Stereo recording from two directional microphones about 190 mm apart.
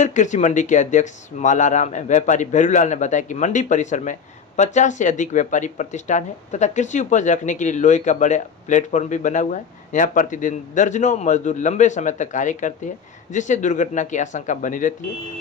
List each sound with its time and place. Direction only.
0.0 s speech: 40° left (ahead or behind)